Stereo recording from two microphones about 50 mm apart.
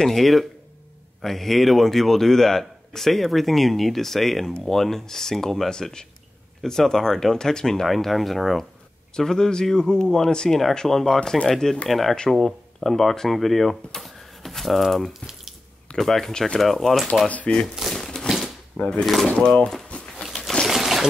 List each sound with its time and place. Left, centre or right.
0.0 s a man's voice: centre
11.1 s speech: centre
11.4 s a man's voice: centre
17.7 s crumpling: centre
18.8 s speech: centre
19.9 s a sound: left
20.2 s a sound: centre